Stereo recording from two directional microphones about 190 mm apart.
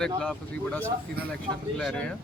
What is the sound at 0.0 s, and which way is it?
Speech, 5° left (ahead or behind).